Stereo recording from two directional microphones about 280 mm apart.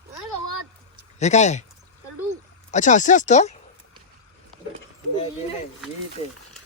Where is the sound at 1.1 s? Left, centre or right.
Left.